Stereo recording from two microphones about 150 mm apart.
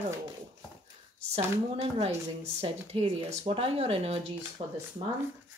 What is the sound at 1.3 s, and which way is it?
Speech, 45° right (ahead or behind).